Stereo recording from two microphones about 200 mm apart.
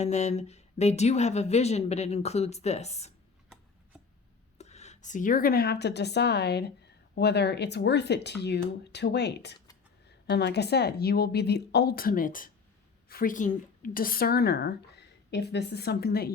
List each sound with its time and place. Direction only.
0.0 s a woman's voice: 35° left (ahead or behind)
4.5 s a woman's voice: 35° left (ahead or behind); by 16.3 s 50° left (ahead or behind)